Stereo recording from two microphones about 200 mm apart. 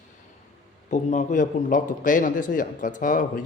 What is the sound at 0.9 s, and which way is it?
A man's voice, 35° left (ahead or behind).